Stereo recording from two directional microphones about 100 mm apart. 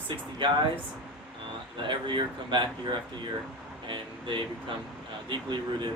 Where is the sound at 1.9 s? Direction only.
55° right (ahead or behind).